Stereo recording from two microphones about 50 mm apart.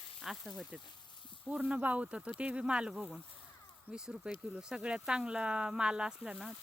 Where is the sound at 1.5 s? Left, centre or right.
Right.